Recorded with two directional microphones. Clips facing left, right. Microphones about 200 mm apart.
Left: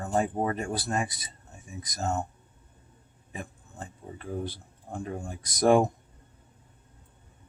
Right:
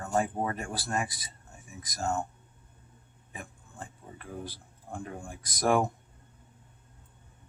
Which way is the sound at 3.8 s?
25° left (ahead or behind).